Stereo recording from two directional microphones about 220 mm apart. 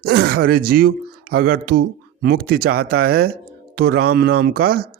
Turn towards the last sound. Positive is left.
turn(degrees=-45)  # may be behind; listen again after turning